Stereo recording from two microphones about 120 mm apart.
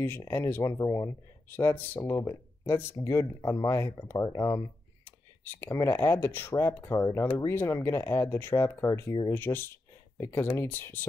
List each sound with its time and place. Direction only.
0.3 s speech: 20° left (ahead or behind)
5.0 s speech: 15° left (ahead or behind)